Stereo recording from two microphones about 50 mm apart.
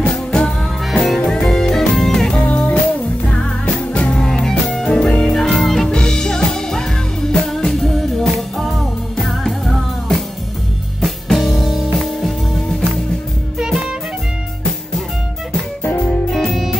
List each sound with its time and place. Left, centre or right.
0.0 s music: centre
2.3 s music: left
4.1 s music: centre
7.8 s music: centre
16.3 s music: centre